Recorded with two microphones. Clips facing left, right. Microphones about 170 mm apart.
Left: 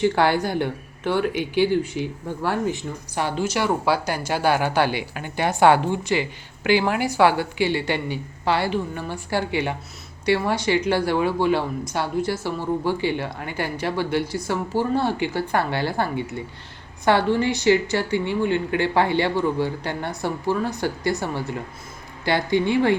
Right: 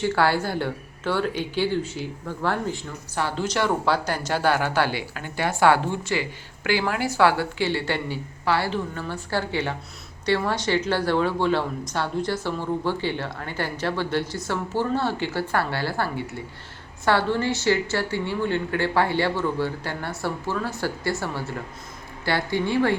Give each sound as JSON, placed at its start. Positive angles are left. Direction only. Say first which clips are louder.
{"t": 0.0, "sound": "a woman's voice", "louder": "left 3 dB", "side_deg": 15}